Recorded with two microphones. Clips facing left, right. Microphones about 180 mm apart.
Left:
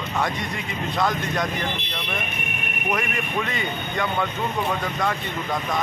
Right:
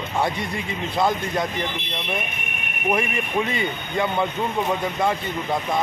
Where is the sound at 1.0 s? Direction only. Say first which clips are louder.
Right 2 dB; 25° right (ahead or behind).